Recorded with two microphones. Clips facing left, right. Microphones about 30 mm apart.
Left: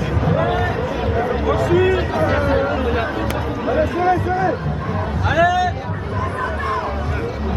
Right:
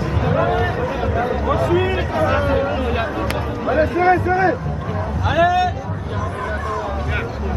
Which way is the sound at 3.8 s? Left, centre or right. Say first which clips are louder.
Right 3 dB; right.